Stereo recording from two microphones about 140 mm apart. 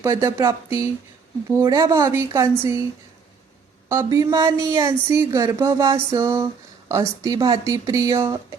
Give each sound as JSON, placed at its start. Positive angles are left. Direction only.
{"t": 0.0, "sound": "speech", "side_deg": -20}
{"t": 3.8, "sound": "speech", "side_deg": -20}